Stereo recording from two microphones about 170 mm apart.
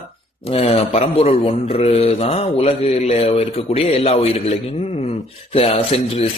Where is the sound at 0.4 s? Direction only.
35° left (ahead or behind).